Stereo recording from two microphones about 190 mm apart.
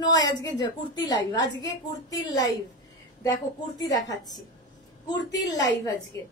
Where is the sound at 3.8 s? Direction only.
20° left (ahead or behind).